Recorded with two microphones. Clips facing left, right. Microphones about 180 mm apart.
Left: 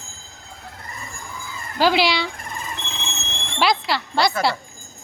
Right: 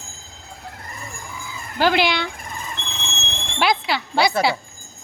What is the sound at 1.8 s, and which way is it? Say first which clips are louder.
Speech: even; centre (ahead or behind).